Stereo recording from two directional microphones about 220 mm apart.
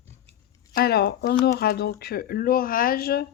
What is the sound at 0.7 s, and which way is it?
Speech, 45° left (ahead or behind).